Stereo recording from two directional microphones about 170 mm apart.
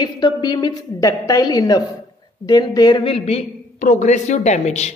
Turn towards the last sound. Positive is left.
turn(degrees=40)  # may be behind; listen again after turning